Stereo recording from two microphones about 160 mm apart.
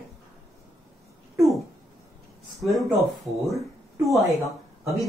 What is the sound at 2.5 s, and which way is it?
Speech, centre (ahead or behind).